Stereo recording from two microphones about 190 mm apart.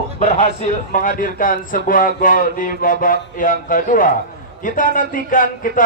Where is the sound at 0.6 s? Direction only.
45° left (ahead or behind).